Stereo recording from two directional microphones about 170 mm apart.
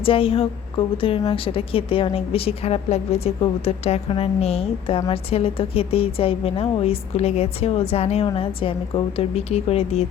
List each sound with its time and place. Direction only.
0.0 s a woman's voice: 30° left (ahead or behind)